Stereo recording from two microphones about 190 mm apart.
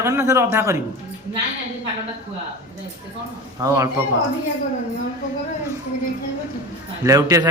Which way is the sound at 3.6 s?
15° right (ahead or behind).